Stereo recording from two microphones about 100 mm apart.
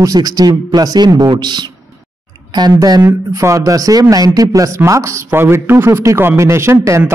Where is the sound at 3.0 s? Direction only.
30° right (ahead or behind).